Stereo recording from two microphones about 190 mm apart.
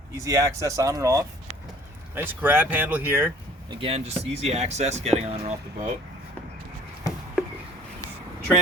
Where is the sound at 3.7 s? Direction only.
30° right (ahead or behind).